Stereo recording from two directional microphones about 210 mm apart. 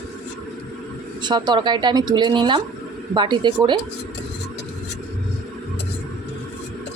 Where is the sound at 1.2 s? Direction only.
20° right (ahead or behind).